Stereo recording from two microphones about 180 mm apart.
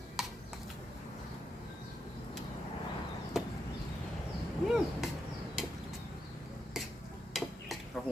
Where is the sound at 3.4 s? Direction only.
Centre (ahead or behind).